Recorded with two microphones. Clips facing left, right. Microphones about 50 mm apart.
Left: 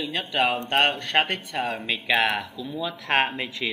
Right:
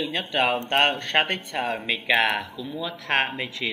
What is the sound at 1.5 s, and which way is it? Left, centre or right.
A man's voice, centre.